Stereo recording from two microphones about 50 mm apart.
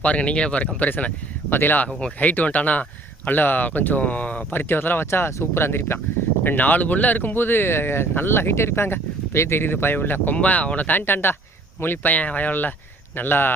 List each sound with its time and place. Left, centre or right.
0.0 s speech: left
4.5 s speech: left
6.4 s speech: left
10.3 s speech: left
12.1 s speech: left